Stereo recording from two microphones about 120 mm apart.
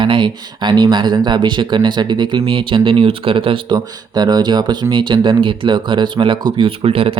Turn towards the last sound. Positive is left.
turn(degrees=-50)  # may be behind; listen again after turning